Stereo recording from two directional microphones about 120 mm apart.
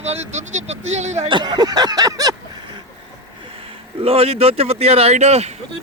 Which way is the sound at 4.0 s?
55° right (ahead or behind).